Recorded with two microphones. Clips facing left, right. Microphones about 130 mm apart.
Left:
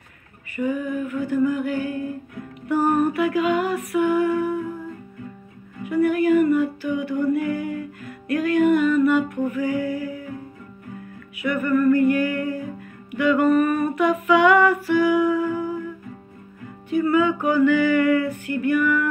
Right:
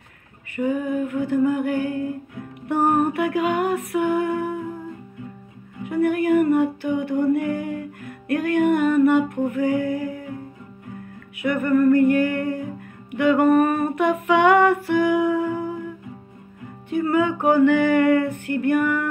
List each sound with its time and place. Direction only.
0.6 s music: 60° right (ahead or behind)
3.1 s music: 55° right (ahead or behind)
5.9 s music: 55° right (ahead or behind)
11.3 s a sound: 50° right (ahead or behind)
12.1 s music: 55° right (ahead or behind)
13.1 s a sound: 55° right (ahead or behind)
16.9 s music: 55° right (ahead or behind)